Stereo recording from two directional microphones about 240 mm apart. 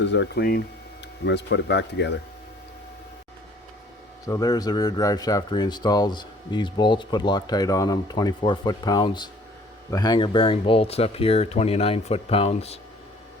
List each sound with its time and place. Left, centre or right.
0.0 s speech: left
4.3 s speech: centre